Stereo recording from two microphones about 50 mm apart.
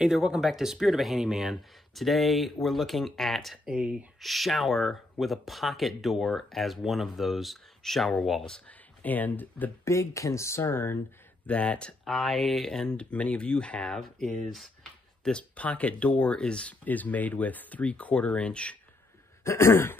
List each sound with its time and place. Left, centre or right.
0.0 s speech: centre
3.6 s speech: centre
4.2 s speech: centre
8.6 s speech: left
9.8 s speech: left
11.4 s speech: left
12.0 s speech: centre
12.8 s speech: left
15.3 s speech: left
16.8 s speech: left
19.4 s throat clearing: left